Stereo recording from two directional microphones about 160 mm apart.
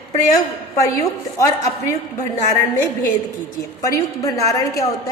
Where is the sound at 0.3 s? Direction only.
20° left (ahead or behind).